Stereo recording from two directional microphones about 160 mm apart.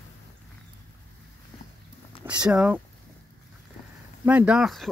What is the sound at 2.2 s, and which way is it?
Speech, 5° right (ahead or behind).